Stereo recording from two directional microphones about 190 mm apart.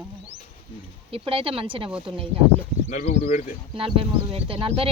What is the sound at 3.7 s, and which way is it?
Speech, 30° right (ahead or behind).